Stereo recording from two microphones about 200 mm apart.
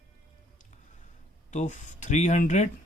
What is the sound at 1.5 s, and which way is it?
Speech, 35° left (ahead or behind).